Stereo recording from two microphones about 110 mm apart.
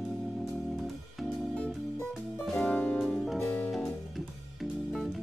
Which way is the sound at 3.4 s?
15° left (ahead or behind).